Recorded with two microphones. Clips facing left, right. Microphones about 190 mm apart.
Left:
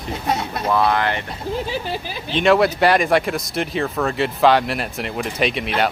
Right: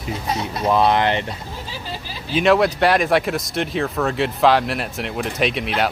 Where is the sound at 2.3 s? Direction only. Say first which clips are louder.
Even; centre (ahead or behind).